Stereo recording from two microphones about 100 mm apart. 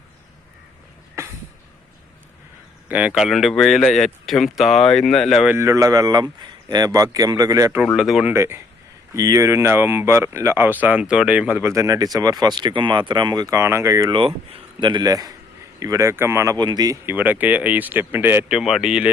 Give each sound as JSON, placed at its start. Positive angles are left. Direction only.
{"t": 2.9, "sound": "speech", "side_deg": -10}
{"t": 3.2, "sound": "speech", "side_deg": 0}
{"t": 5.5, "sound": "speech", "side_deg": -30}
{"t": 7.9, "sound": "speech", "side_deg": -5}
{"t": 8.3, "sound": "speech", "side_deg": -25}
{"t": 11.7, "sound": "speech", "side_deg": -35}
{"t": 14.1, "sound": "speech", "side_deg": -65}
{"t": 14.8, "sound": "speech", "side_deg": -50}
{"t": 16.6, "sound": "speech", "side_deg": -45}
{"t": 17.1, "sound": "speech", "side_deg": -15}
{"t": 18.4, "sound": "speech", "side_deg": -5}